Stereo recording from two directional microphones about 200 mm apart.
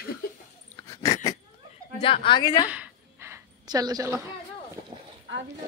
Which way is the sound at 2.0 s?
25° left (ahead or behind).